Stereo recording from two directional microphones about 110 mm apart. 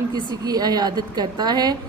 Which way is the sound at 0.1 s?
40° right (ahead or behind).